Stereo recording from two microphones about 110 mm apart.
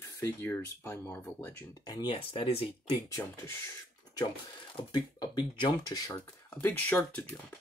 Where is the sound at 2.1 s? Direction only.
55° left (ahead or behind).